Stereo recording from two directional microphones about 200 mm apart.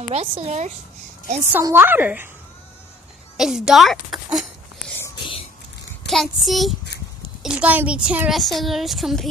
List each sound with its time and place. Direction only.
0.1 s speech: 35° right (ahead or behind)
1.5 s a woman's voice: 10° right (ahead or behind)
3.3 s a sound: centre (ahead or behind)
5.0 s whispering: 25° left (ahead or behind)
6.0 s a child's voice: centre (ahead or behind)